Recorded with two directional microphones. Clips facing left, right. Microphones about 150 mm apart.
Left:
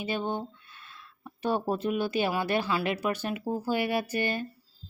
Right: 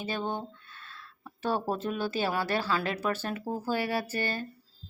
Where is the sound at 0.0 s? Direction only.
15° left (ahead or behind).